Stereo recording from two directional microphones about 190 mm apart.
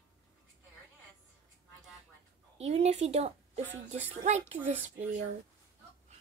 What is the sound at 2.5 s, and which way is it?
A woman's voice, 35° right (ahead or behind).